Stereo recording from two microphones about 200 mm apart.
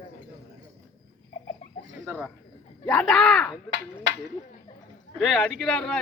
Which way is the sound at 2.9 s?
5° left (ahead or behind).